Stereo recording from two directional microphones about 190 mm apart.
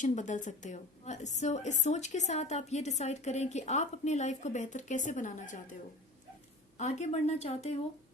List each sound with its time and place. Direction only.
0.0 s a woman's voice: 40° left (ahead or behind)
6.7 s a woman's voice: 35° left (ahead or behind)